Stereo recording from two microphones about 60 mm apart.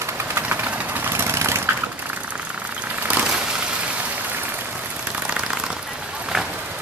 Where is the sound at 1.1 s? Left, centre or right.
Right.